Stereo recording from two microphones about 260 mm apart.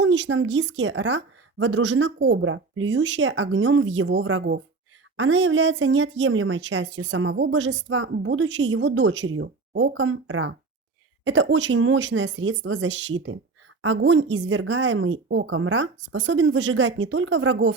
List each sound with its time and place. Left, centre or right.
0.0 s speech: right